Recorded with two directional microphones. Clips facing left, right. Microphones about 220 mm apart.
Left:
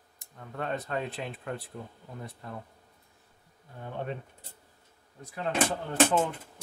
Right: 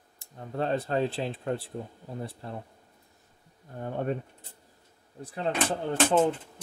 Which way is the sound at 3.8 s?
45° right (ahead or behind).